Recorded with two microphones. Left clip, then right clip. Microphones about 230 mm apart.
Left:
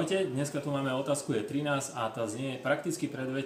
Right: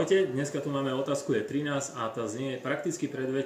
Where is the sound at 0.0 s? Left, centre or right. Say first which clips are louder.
Right 5 dB; centre.